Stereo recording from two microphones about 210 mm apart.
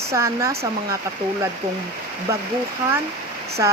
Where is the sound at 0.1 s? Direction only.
15° right (ahead or behind).